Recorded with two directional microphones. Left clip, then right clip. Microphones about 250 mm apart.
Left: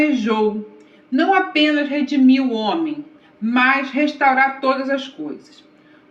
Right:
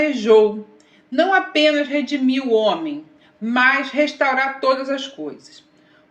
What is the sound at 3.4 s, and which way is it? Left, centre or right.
Speech, right.